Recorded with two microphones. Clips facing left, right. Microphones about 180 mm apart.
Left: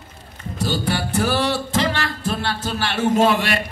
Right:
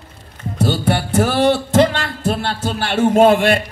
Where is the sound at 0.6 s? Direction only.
55° right (ahead or behind).